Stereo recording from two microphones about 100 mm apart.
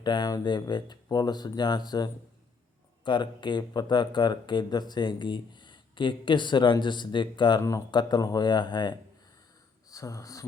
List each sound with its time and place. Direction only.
0.0 s speech: 45° left (ahead or behind)
9.9 s speech: 35° left (ahead or behind)